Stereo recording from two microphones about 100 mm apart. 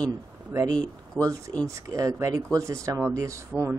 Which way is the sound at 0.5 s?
20° right (ahead or behind).